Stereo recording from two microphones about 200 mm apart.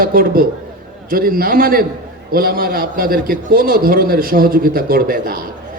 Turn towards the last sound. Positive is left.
turn(degrees=-45)  # may be behind; listen again after turning